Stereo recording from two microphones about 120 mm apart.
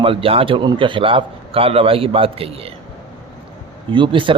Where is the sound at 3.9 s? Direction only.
45° right (ahead or behind).